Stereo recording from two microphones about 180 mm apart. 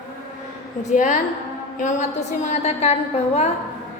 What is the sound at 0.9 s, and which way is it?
A woman's voice, 45° left (ahead or behind).